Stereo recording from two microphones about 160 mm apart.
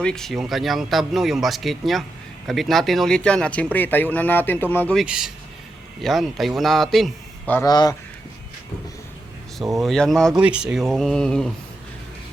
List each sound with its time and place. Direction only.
0.0 s speech: 5° left (ahead or behind)
4.9 s speech: 5° right (ahead or behind)
7.5 s speech: 25° left (ahead or behind)
9.8 s speech: centre (ahead or behind)